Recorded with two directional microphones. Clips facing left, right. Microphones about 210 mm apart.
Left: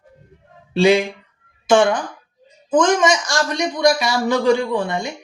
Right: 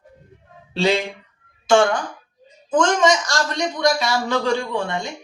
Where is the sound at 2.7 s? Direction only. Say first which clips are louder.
Left 2 dB; 15° left (ahead or behind).